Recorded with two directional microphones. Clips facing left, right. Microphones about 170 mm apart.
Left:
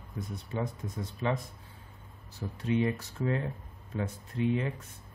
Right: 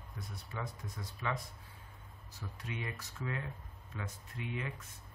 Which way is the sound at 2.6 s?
30° left (ahead or behind).